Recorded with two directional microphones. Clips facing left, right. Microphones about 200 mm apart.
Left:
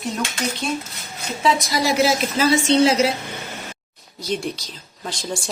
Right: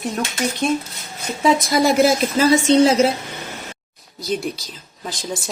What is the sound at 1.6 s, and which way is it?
Speech, 50° right (ahead or behind).